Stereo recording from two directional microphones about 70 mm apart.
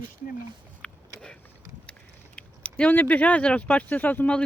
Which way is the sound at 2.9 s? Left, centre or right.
Left.